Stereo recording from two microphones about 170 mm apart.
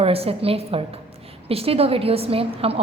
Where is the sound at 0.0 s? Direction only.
35° right (ahead or behind).